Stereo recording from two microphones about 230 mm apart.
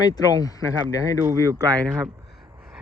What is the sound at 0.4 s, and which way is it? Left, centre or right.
Speech, centre.